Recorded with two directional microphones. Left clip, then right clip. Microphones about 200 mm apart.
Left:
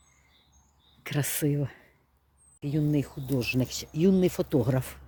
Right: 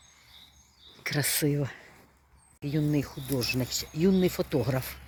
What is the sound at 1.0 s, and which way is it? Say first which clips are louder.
Speech: right 2 dB; 15° left (ahead or behind).